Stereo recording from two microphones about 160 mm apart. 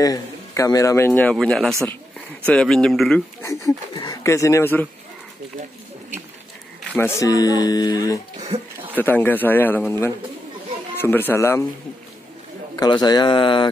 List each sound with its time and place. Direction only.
0.0 s a man's voice: 25° left (ahead or behind); by 3.2 s 5° left (ahead or behind)
3.4 s speech: 20° left (ahead or behind)
7.0 s speech: 15° left (ahead or behind)
8.4 s a sound: 40° right (ahead or behind)
8.9 s a man's voice: 10° left (ahead or behind)
12.7 s speech: 25° left (ahead or behind)